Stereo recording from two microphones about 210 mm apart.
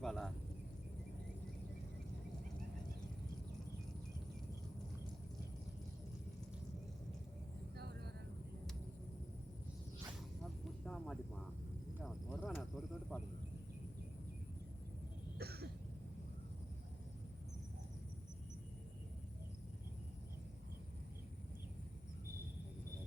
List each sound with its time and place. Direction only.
0.0 s a sound: centre (ahead or behind)
7.8 s vehicle: 50° right (ahead or behind)
10.4 s snake: centre (ahead or behind)
12.0 s cricket: centre (ahead or behind)
15.4 s cough: 50° right (ahead or behind)